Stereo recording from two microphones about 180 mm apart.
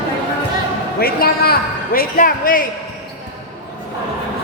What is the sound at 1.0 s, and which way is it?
A man's voice, 55° left (ahead or behind).